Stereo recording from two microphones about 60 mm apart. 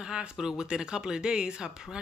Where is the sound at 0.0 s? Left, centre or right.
Centre.